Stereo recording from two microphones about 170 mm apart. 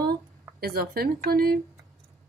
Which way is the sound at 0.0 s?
70° right (ahead or behind).